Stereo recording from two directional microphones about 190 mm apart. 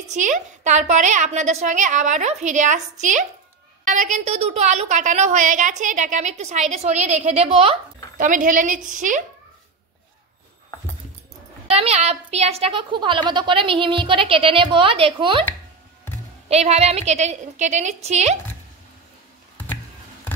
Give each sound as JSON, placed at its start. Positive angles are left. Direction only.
{"t": 0.1, "sound": "a woman's voice", "side_deg": -40}
{"t": 8.2, "sound": "a woman's voice", "side_deg": -45}
{"t": 11.7, "sound": "a woman's voice", "side_deg": -35}
{"t": 16.4, "sound": "a woman's voice", "side_deg": -35}